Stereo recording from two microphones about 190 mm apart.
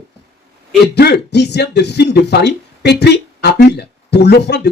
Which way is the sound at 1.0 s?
60° left (ahead or behind).